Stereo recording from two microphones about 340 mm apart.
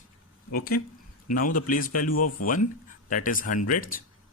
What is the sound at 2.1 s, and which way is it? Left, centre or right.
Speech, left.